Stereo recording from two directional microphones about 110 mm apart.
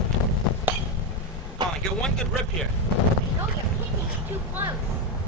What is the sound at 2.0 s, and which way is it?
Speech, 5° left (ahead or behind).